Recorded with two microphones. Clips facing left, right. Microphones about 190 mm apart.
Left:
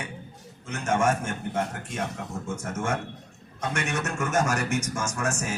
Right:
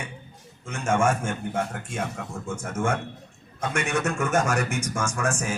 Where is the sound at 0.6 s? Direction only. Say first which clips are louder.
Right 2 dB; 50° right (ahead or behind).